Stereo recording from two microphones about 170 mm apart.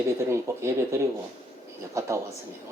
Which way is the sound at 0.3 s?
15° right (ahead or behind).